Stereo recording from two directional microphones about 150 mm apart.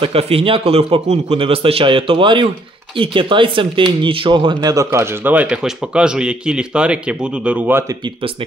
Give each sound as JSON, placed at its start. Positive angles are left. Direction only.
{"t": 0.0, "sound": "a man's voice", "side_deg": -40}